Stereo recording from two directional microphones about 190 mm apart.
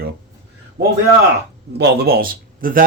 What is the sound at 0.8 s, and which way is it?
A man's voice, 60° right (ahead or behind).